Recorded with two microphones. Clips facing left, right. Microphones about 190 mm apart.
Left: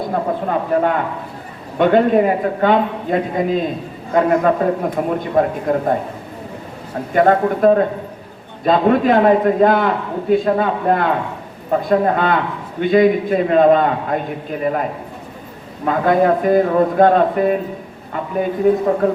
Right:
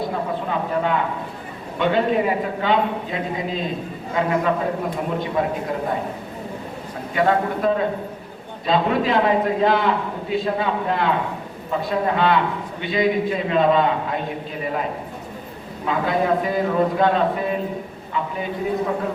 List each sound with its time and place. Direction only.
0.1 s a sound: 50° left (ahead or behind)
1.8 s a man's voice: 50° left (ahead or behind)
7.1 s a man's voice: 50° left (ahead or behind)
15.8 s a man's voice: 55° left (ahead or behind)
18.1 s a sound: 50° left (ahead or behind)
18.6 s a man's voice: 50° left (ahead or behind)